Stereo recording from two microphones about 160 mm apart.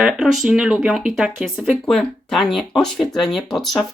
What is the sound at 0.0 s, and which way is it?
Speech, 5° right (ahead or behind).